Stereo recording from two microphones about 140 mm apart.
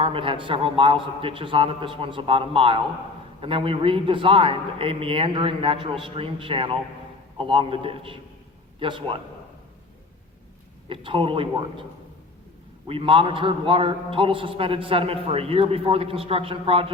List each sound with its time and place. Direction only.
0.0 s a man's voice: 40° right (ahead or behind)
10.8 s a man's voice: 40° right (ahead or behind)
12.9 s a man's voice: 40° right (ahead or behind)